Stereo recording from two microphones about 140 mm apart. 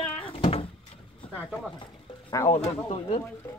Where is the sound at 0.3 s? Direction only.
45° left (ahead or behind).